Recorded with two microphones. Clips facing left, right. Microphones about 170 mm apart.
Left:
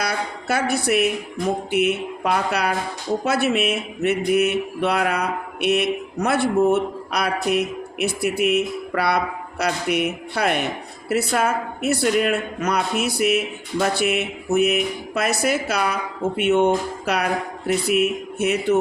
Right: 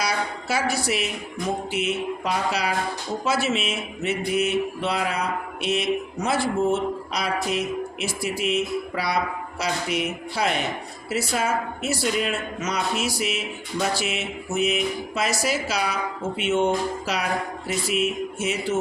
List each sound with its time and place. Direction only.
0.0 s a woman's voice: 55° left (ahead or behind)